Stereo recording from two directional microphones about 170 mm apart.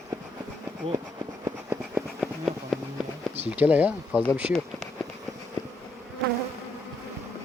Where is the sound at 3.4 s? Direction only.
10° right (ahead or behind).